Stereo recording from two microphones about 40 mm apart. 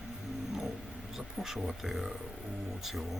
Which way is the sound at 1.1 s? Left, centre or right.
Centre.